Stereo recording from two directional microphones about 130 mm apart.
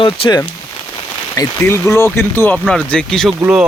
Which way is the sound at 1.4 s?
20° left (ahead or behind).